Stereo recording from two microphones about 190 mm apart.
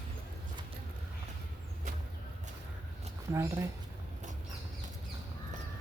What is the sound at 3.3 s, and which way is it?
Speech, 15° right (ahead or behind).